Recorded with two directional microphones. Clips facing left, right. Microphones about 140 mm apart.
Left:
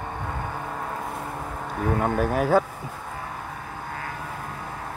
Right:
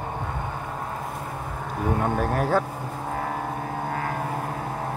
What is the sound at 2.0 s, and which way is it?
Speech, 5° left (ahead or behind).